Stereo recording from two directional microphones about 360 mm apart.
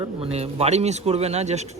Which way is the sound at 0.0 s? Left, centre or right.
Centre.